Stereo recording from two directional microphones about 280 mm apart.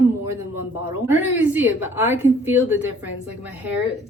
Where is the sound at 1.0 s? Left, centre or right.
Centre.